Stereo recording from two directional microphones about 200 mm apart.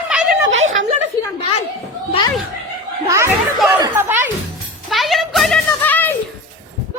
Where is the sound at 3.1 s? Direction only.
15° right (ahead or behind).